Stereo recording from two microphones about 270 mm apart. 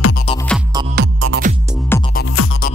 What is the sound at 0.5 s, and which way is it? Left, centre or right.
Music, centre.